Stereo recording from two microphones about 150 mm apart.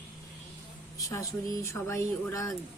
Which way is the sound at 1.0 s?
20° left (ahead or behind).